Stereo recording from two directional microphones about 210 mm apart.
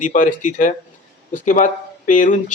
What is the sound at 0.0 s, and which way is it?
A man's voice, 40° left (ahead or behind).